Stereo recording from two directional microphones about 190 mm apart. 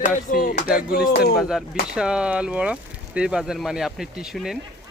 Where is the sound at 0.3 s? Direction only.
45° left (ahead or behind).